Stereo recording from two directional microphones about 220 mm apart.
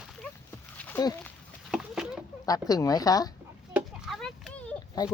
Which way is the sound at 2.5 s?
15° left (ahead or behind).